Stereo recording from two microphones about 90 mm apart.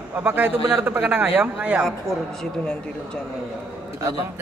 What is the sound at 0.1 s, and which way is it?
A man's voice, 20° right (ahead or behind).